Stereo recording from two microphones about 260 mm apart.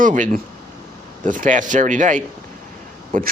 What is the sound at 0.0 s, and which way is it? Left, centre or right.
A woman's voice, right.